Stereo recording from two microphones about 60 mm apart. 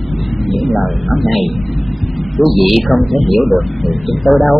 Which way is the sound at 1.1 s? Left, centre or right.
Centre.